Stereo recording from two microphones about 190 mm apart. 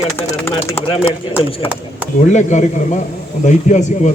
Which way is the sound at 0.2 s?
10° left (ahead or behind).